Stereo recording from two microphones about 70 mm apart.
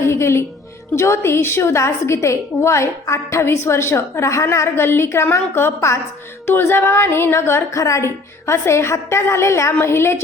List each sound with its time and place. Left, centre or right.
0.0 s music: left
0.9 s a woman's voice: left
7.8 s a woman's voice: left